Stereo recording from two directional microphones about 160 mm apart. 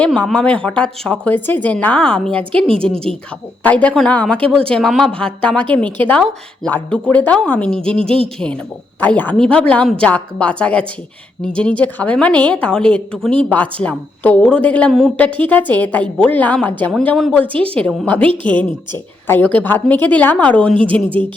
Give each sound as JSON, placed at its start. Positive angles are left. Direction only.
{"t": 0.0, "sound": "a woman's voice", "side_deg": 5}
{"t": 18.3, "sound": "speech", "side_deg": -30}
{"t": 18.6, "sound": "a woman's voice", "side_deg": 10}
{"t": 20.8, "sound": "speech", "side_deg": -30}